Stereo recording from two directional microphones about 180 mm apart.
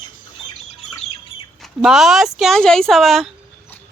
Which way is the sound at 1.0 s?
35° left (ahead or behind).